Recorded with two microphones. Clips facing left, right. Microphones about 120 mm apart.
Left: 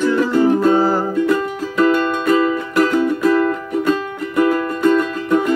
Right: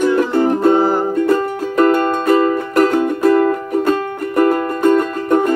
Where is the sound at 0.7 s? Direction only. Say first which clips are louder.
Right 1 dB; 20° right (ahead or behind).